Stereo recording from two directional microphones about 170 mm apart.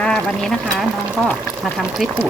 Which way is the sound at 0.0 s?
Centre (ahead or behind).